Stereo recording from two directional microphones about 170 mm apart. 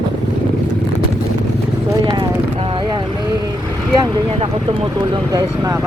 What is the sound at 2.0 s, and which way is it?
Vehicle, 25° right (ahead or behind).